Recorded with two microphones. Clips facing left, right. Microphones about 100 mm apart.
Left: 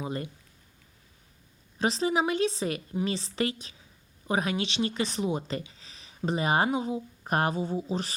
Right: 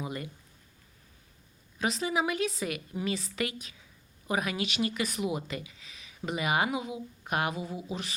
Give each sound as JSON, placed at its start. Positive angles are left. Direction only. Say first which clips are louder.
{"t": 0.0, "sound": "speech", "louder": "left 3 dB", "side_deg": 30}
{"t": 1.8, "sound": "speech", "louder": "left 3 dB", "side_deg": 30}